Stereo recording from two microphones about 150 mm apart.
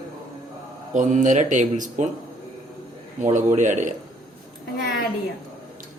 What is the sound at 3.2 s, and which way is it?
Speech, 60° right (ahead or behind).